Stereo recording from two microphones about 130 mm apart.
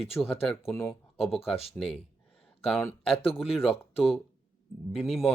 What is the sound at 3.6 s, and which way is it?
Speech, 45° left (ahead or behind).